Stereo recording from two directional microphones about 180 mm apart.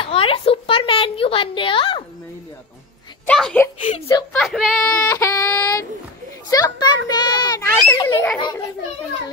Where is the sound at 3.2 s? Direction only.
5° left (ahead or behind).